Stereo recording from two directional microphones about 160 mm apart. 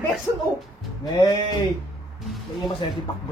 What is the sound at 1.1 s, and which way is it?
Speech, 30° left (ahead or behind).